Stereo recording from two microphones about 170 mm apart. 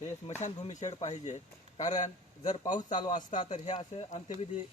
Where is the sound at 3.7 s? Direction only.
40° left (ahead or behind).